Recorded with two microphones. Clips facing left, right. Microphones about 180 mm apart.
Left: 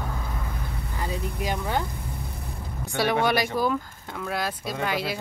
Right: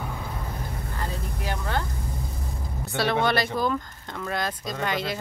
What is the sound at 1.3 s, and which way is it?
Speech, 15° left (ahead or behind).